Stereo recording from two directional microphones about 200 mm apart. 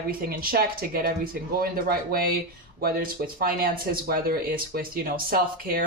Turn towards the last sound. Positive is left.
turn(degrees=-45)  # may be behind; listen again after turning